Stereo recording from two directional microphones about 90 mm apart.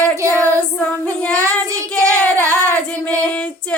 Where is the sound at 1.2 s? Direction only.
15° left (ahead or behind).